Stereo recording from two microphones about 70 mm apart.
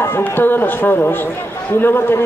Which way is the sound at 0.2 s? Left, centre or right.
Left.